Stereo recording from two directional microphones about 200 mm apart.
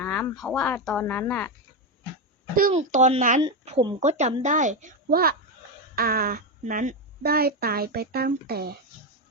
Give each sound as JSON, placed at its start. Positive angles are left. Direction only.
{"t": 0.0, "sound": "speech", "side_deg": 5}
{"t": 2.7, "sound": "a woman's voice", "side_deg": -35}